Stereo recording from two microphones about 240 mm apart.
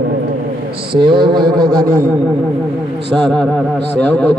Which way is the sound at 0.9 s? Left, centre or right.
Centre.